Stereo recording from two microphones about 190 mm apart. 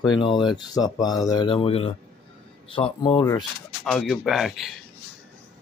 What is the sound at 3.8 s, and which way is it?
Speech, centre (ahead or behind).